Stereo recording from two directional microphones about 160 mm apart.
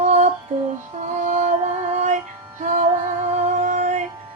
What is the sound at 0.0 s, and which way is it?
Female singing, 45° right (ahead or behind).